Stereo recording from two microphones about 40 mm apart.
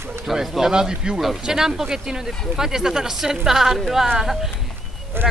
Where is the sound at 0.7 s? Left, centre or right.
Centre.